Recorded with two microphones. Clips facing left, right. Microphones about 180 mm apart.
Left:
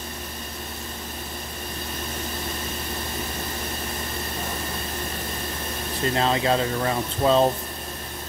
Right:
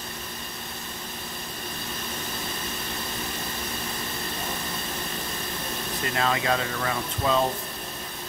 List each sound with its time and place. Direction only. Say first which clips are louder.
6.1 s speech: left 3 dB; 30° left (ahead or behind)